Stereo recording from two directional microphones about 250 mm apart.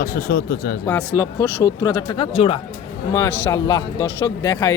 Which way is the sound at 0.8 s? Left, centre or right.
Centre.